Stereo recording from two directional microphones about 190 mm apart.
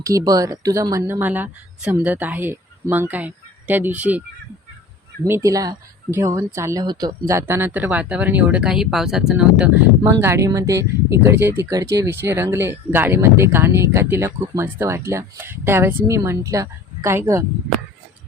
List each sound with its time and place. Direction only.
0.0 s speech: 15° right (ahead or behind)
5.2 s speech: 15° right (ahead or behind)